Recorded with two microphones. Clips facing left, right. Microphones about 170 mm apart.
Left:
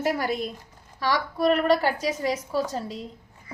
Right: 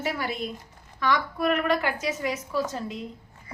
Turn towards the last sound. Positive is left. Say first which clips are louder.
# left 1 dB
turn(degrees=35)  # may be behind; listen again after turning